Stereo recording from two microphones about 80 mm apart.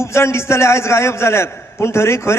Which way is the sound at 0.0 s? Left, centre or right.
Left.